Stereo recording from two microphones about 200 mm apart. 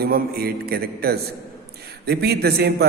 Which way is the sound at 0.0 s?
50° right (ahead or behind).